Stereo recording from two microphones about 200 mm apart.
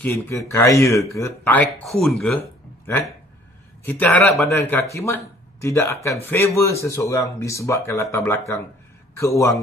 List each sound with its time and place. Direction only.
0.0 s speech: 15° left (ahead or behind)
3.8 s speech: 10° left (ahead or behind)